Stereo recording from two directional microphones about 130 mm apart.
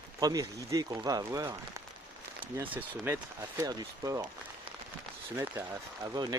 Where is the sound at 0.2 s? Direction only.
25° right (ahead or behind).